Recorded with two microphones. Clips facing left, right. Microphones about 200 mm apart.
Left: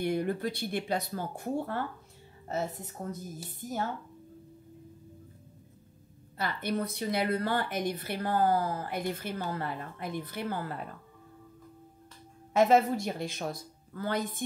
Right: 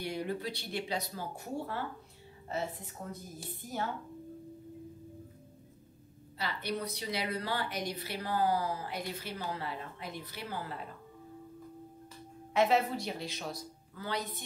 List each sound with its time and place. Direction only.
0.0 s a woman's voice: 55° left (ahead or behind)
6.3 s a woman's voice: 50° left (ahead or behind)
12.5 s a woman's voice: 45° left (ahead or behind)